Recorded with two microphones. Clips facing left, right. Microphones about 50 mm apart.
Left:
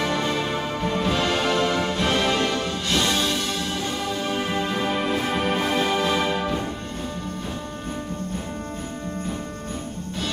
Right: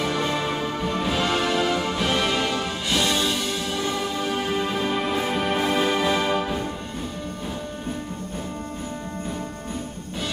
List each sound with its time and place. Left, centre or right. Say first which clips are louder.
0.0 s music: even; centre
4.6 s music: even; centre